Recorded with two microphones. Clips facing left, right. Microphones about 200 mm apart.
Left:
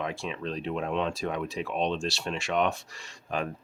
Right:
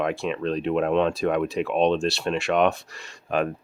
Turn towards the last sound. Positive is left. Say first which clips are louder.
# right 7 dB
turn(degrees=-60)  # may be behind; listen again after turning